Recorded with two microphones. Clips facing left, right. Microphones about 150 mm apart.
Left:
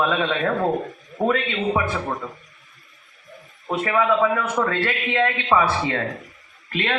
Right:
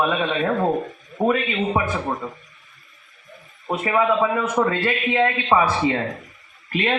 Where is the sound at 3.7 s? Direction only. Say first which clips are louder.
Even; 20° right (ahead or behind).